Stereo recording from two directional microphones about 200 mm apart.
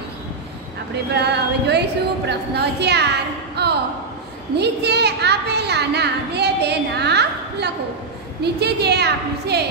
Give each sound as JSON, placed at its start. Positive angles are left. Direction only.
{"t": 1.1, "sound": "a woman's voice", "side_deg": -55}
{"t": 3.6, "sound": "a sound", "side_deg": -55}
{"t": 4.6, "sound": "a child's voice", "side_deg": -55}